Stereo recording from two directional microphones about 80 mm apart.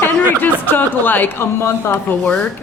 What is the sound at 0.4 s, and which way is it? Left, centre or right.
Speech, left.